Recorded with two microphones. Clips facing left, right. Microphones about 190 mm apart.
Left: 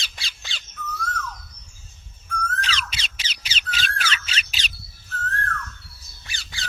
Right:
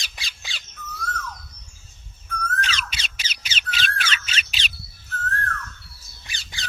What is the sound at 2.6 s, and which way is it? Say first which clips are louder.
Squawk: left 1 dB; 30° left (ahead or behind).